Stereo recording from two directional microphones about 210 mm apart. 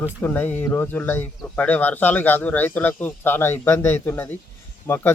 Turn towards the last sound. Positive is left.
turn(degrees=10)  # may be behind; listen again after turning